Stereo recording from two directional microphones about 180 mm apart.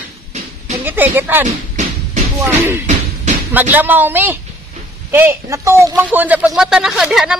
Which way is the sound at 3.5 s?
10° right (ahead or behind).